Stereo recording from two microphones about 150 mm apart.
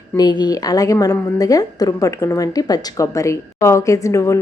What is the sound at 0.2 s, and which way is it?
A woman's voice, 30° left (ahead or behind).